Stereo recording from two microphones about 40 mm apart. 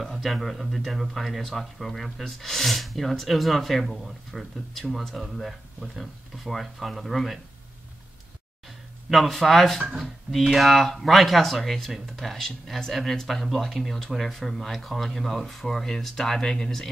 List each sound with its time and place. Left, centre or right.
0.0 s speech: centre
8.6 s speech: centre